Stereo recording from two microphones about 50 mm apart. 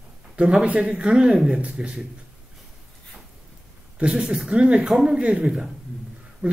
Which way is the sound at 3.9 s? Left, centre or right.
Right.